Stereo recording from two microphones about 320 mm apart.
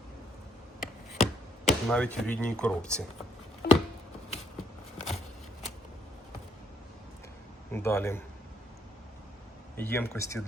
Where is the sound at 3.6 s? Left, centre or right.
Left.